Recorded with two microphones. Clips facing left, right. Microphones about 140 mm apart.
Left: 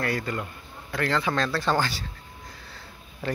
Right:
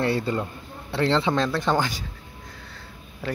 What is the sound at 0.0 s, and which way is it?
A man's voice, 25° right (ahead or behind).